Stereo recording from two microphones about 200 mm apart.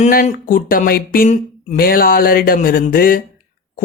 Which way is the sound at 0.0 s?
40° left (ahead or behind).